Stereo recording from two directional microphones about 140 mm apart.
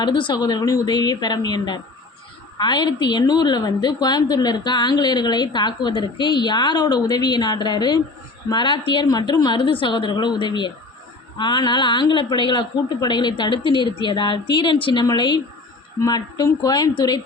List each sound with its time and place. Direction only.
0.0 s a woman's voice: 35° left (ahead or behind)